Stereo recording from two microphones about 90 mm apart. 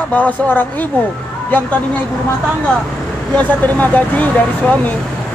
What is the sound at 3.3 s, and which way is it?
Speech, 15° left (ahead or behind).